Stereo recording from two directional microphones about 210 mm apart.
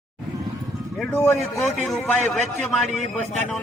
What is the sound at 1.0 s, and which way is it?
Speech, 5° left (ahead or behind).